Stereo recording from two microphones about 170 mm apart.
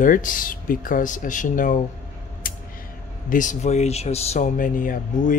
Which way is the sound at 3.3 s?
50° left (ahead or behind).